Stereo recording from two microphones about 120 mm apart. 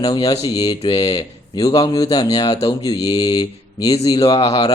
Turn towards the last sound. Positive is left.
turn(degrees=55)  # may be behind; listen again after turning